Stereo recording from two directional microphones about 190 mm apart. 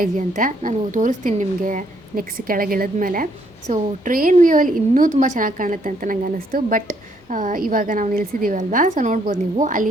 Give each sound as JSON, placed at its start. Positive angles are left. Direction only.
{"t": 0.0, "sound": "speech", "side_deg": -45}